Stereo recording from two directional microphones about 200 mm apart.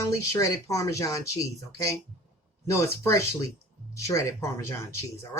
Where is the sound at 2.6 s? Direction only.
15° left (ahead or behind).